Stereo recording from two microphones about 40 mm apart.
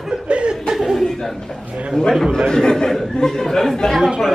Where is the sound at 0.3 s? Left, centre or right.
Right.